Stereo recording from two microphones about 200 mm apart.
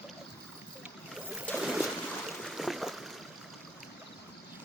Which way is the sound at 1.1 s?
5° left (ahead or behind).